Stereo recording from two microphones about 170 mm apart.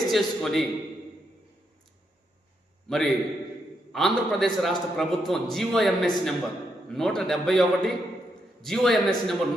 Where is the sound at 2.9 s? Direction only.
5° left (ahead or behind).